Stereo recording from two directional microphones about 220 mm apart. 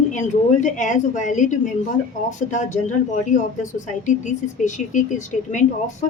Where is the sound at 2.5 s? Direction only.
35° left (ahead or behind).